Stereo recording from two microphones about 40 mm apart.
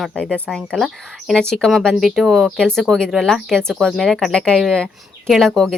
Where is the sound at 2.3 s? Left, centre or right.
Centre.